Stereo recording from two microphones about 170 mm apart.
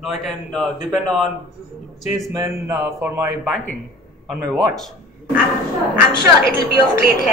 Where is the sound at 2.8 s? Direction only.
10° right (ahead or behind).